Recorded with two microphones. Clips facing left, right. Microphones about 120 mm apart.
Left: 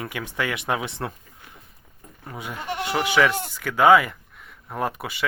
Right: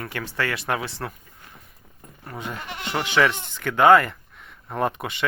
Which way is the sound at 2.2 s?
10° left (ahead or behind).